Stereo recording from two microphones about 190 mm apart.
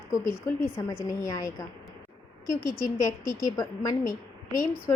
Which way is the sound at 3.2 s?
20° left (ahead or behind).